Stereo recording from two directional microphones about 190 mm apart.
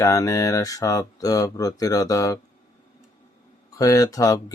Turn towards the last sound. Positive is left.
turn(degrees=20)  # may be behind; listen again after turning